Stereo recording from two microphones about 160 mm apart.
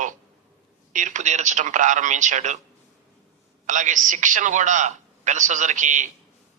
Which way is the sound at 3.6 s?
55° right (ahead or behind).